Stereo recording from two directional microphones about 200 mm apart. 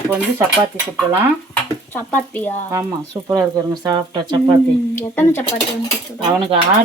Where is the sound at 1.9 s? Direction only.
10° left (ahead or behind).